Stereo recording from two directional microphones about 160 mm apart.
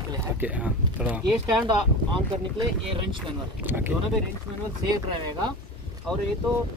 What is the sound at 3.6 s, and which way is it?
Speech, 10° right (ahead or behind).